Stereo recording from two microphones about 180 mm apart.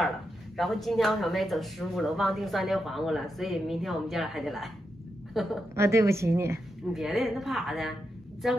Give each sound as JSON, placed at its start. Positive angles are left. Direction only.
{"t": 0.6, "sound": "a woman's voice", "side_deg": 0}
{"t": 5.8, "sound": "a woman's voice", "side_deg": -15}
{"t": 6.9, "sound": "speech", "side_deg": 0}